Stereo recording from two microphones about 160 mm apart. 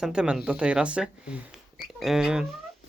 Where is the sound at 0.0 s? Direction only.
5° right (ahead or behind).